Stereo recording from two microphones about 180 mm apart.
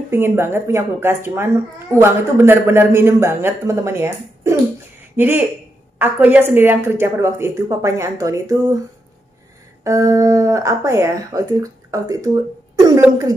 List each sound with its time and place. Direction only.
0.1 s speech: 15° right (ahead or behind)
9.8 s a woman's voice: 15° right (ahead or behind)